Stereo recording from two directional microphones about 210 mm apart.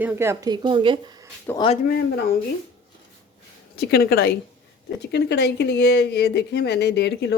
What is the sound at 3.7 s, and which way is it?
Speech, 45° left (ahead or behind).